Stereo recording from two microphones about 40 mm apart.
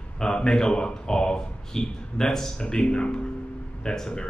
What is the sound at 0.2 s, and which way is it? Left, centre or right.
Speech, centre.